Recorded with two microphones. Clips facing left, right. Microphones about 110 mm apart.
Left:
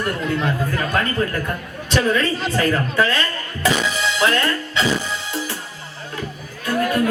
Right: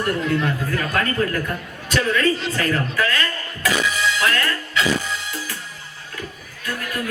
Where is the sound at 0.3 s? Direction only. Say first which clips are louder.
Left 1 dB; 25° left (ahead or behind).